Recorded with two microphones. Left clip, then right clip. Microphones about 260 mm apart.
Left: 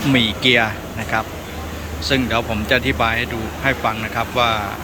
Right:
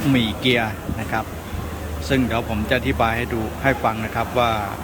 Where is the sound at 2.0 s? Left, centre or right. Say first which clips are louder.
Left 3 dB; centre.